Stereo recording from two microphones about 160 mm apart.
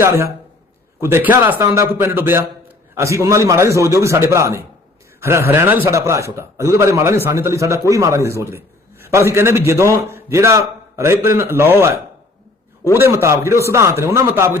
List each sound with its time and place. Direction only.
0.0 s a man's voice: 20° right (ahead or behind)